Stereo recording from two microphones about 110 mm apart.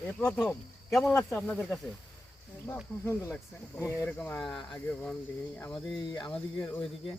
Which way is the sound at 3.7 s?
25° left (ahead or behind).